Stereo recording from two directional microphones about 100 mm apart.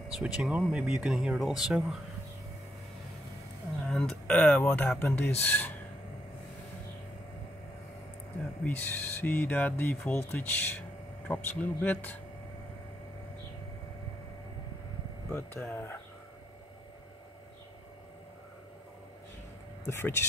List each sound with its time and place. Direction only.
0.1 s speech: 10° right (ahead or behind)
3.8 s speech: 5° left (ahead or behind)
8.6 s speech: 20° left (ahead or behind)
15.3 s speech: 25° left (ahead or behind)
19.9 s speech: 25° left (ahead or behind)